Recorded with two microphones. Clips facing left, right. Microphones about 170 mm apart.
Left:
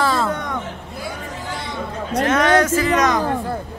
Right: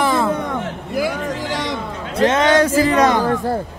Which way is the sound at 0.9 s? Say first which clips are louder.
Right 11 dB; 90° right.